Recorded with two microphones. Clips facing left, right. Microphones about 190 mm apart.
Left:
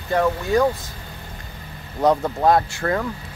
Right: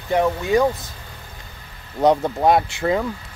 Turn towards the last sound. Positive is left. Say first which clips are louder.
# right 2 dB
turn(degrees=-15)  # may be behind; listen again after turning